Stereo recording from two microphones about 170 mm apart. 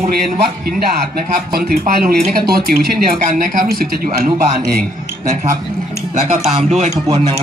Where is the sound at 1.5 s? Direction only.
65° right (ahead or behind).